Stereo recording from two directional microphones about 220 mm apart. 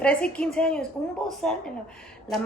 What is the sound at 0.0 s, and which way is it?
Speech, 5° left (ahead or behind).